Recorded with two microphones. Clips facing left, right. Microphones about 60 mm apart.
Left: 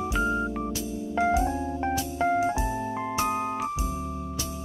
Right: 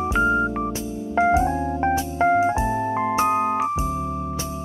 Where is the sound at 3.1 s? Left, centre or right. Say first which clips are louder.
Right 7 dB; right.